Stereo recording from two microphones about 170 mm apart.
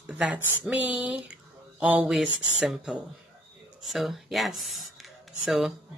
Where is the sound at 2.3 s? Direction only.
90° left.